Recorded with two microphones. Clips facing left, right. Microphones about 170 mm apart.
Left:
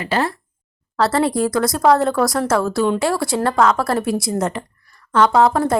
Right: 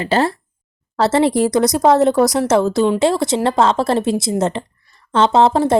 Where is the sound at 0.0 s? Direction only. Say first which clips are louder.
Right 4 dB; 30° right (ahead or behind).